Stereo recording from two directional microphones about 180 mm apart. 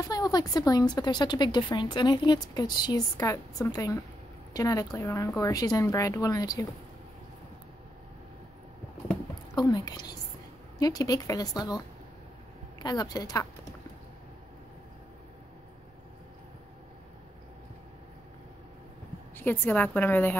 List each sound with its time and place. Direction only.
0.0 s a woman's voice: 20° left (ahead or behind)
9.6 s a woman's voice: 25° left (ahead or behind)
19.3 s a woman's voice: 10° left (ahead or behind)